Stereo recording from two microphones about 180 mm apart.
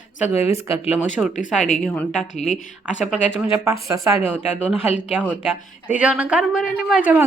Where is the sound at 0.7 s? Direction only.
10° right (ahead or behind).